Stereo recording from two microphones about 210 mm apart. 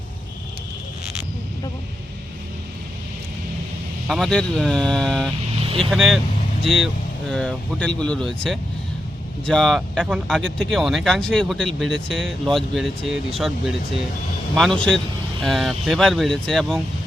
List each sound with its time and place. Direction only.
4.1 s speech: 5° left (ahead or behind)
5.6 s vehicle: 25° right (ahead or behind)
5.9 s speech: centre (ahead or behind)